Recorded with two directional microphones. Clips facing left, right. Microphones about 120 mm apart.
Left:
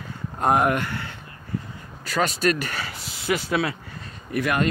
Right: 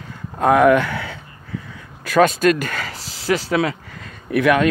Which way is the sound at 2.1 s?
50° right (ahead or behind).